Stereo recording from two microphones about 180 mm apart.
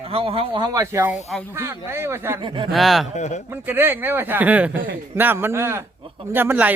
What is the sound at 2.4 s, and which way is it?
Speech, 25° right (ahead or behind).